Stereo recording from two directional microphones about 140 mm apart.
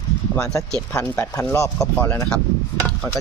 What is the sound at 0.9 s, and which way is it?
Speech, 20° left (ahead or behind).